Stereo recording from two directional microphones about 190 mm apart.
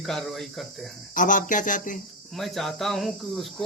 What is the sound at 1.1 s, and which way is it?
Speech, 45° left (ahead or behind).